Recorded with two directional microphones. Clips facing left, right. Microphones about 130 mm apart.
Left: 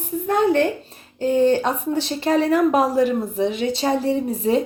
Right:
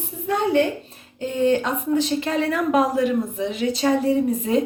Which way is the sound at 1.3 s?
35° left (ahead or behind).